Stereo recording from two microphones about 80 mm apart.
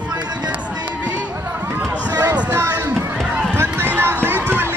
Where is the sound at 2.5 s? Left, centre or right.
Right.